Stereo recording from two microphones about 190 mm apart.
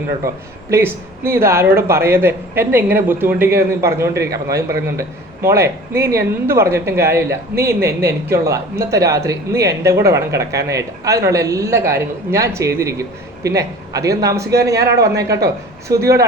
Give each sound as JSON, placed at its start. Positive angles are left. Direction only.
{"t": 0.2, "sound": "speech", "side_deg": -15}